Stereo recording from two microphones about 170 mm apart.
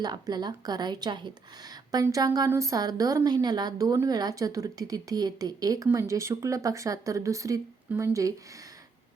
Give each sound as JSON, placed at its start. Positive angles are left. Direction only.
{"t": 0.0, "sound": "speech", "side_deg": -25}